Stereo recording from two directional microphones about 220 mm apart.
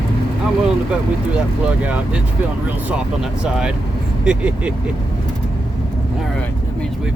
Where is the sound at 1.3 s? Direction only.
5° right (ahead or behind).